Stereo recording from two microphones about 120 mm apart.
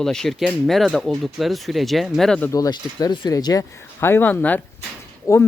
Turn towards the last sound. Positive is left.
turn(degrees=25)  # may be behind; listen again after turning